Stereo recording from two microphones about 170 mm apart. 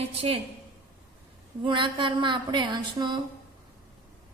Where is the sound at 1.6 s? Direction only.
30° right (ahead or behind).